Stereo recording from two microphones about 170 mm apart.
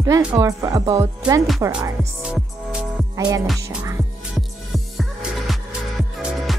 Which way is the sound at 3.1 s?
20° right (ahead or behind).